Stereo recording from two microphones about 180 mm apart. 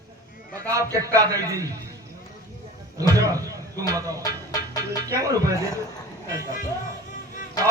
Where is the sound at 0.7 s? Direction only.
20° right (ahead or behind).